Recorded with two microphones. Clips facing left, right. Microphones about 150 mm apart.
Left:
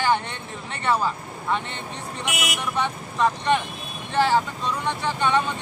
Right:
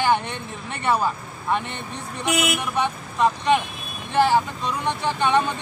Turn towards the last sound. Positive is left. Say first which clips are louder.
# right 2 dB
turn(degrees=-15)  # may be behind; listen again after turning